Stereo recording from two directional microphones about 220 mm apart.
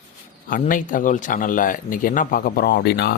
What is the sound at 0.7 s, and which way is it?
Speech, 35° left (ahead or behind).